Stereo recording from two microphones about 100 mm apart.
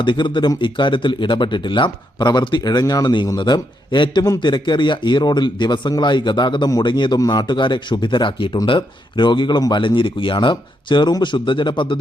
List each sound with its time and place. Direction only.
0.0 s speech: 55° left (ahead or behind)
9.8 s speech: 55° left (ahead or behind)